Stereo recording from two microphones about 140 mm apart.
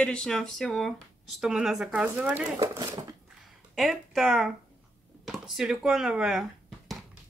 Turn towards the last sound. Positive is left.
turn(degrees=-5)  # may be behind; listen again after turning